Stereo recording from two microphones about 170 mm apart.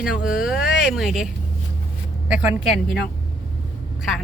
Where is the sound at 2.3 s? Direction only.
10° right (ahead or behind).